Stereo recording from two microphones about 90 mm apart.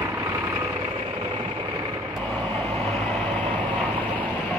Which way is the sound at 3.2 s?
15° left (ahead or behind).